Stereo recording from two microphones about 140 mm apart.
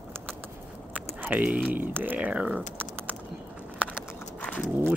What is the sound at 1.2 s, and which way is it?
Speech, 10° right (ahead or behind).